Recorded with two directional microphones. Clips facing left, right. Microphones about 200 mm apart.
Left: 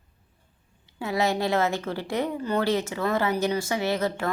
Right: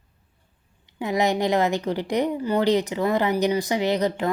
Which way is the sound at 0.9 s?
15° right (ahead or behind).